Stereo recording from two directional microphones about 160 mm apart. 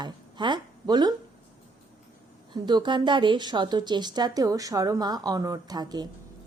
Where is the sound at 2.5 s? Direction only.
30° right (ahead or behind).